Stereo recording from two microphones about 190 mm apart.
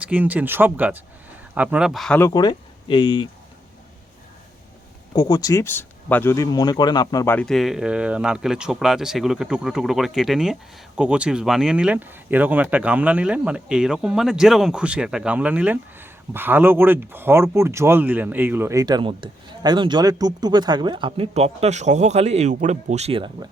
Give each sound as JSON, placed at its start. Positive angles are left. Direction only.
{"t": 0.0, "sound": "speech", "side_deg": -10}
{"t": 2.1, "sound": "speech", "side_deg": 20}
{"t": 5.1, "sound": "speech", "side_deg": 20}
{"t": 7.3, "sound": "speech", "side_deg": 0}